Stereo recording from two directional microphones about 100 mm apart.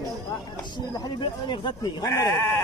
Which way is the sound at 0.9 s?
50° left (ahead or behind).